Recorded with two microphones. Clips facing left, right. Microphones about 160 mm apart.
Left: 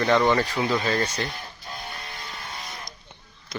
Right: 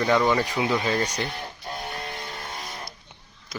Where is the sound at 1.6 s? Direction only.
40° right (ahead or behind).